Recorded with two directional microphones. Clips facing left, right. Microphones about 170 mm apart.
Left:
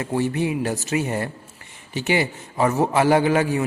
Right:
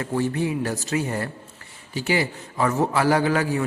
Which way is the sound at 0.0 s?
15° left (ahead or behind).